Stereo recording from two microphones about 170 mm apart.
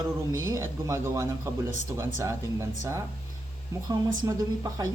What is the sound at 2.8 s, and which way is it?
A man's voice, 15° right (ahead or behind).